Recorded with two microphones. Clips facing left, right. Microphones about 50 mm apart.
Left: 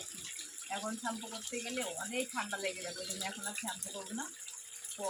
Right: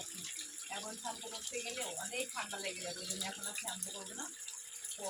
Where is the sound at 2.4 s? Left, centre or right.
Left.